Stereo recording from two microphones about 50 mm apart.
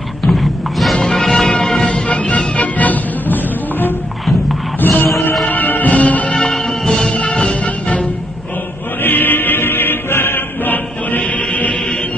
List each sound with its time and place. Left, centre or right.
0.2 s music: centre
1.9 s music: left
4.7 s music: left
5.4 s music: left
6.3 s music: centre
7.2 s music: left
9.0 s music: left